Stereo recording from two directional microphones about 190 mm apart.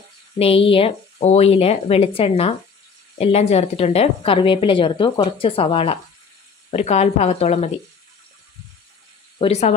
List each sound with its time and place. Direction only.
0.4 s a woman's voice: 30° left (ahead or behind)
9.4 s a woman's voice: 35° left (ahead or behind)